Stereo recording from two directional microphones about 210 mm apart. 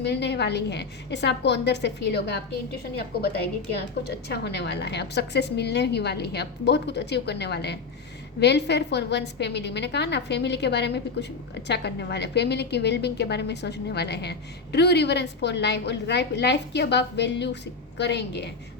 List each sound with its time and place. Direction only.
0.0 s a woman's voice: 55° left (ahead or behind)